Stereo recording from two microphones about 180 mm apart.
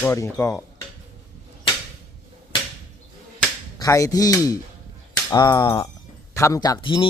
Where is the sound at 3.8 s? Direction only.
20° left (ahead or behind).